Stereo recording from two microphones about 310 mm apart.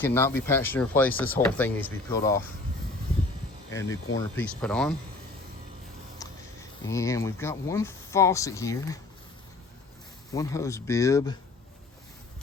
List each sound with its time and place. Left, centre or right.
0.0 s speech: centre
3.7 s speech: centre
6.1 s speech: centre
10.3 s speech: centre